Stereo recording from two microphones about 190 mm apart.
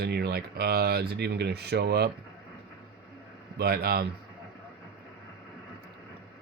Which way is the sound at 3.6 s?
55° right (ahead or behind).